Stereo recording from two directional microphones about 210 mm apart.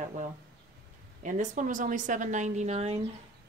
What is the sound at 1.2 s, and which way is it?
Speech, 35° right (ahead or behind).